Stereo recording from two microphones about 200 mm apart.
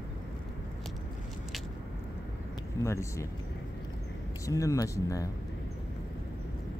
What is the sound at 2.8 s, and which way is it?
Speech, 15° left (ahead or behind).